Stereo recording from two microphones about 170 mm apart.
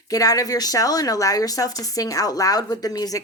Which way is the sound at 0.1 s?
20° left (ahead or behind).